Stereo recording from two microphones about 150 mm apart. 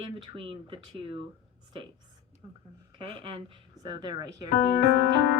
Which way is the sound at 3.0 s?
35° right (ahead or behind).